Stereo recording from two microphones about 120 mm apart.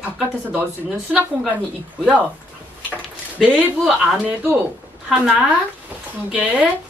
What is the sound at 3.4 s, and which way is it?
Speech, 15° right (ahead or behind).